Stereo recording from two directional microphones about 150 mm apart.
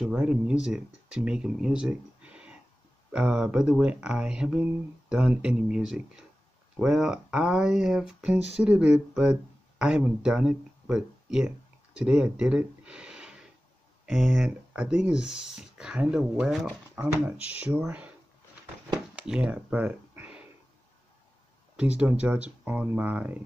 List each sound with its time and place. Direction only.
0.0 s speech: 10° right (ahead or behind)
19.1 s a sound: 5° right (ahead or behind)
21.7 s speech: 5° right (ahead or behind)